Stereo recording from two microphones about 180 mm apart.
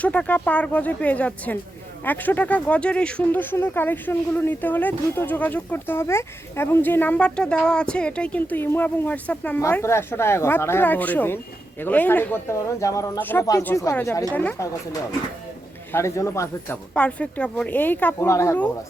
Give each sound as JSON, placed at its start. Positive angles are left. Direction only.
{"t": 0.0, "sound": "speech", "side_deg": 5}
{"t": 15.9, "sound": "speech", "side_deg": 15}